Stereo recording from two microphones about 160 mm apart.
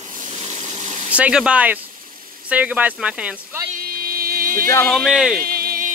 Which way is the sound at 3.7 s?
65° right (ahead or behind).